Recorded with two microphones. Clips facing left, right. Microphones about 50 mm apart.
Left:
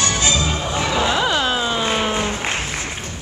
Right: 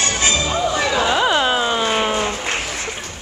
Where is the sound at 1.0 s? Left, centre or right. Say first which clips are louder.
Right 3 dB; centre.